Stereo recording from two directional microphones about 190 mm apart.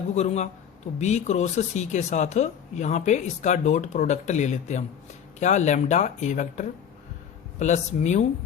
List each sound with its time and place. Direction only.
0.1 s speech: 35° left (ahead or behind)